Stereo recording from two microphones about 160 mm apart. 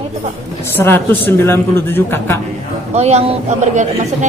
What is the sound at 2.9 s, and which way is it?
Speech, 45° right (ahead or behind).